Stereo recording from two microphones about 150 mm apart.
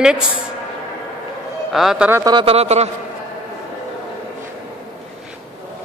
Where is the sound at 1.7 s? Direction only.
Centre (ahead or behind).